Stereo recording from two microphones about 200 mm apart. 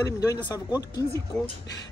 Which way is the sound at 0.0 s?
15° left (ahead or behind).